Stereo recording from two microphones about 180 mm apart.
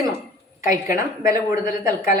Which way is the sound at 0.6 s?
20° right (ahead or behind).